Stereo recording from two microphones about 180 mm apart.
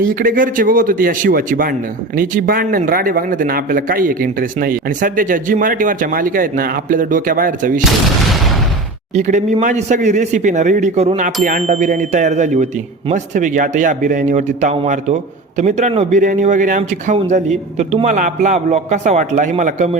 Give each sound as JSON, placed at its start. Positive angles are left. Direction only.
{"t": 0.0, "sound": "speech", "side_deg": -50}
{"t": 9.1, "sound": "a man's voice", "side_deg": -40}